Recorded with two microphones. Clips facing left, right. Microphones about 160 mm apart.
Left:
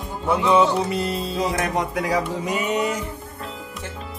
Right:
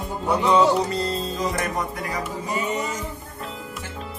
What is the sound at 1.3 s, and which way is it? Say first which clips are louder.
Speech: left 3 dB; 80° left.